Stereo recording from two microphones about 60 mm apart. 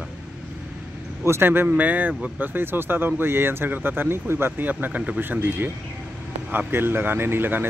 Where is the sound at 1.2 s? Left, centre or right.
Right.